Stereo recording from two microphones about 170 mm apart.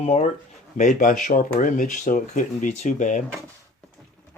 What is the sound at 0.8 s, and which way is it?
Speech, 50° left (ahead or behind).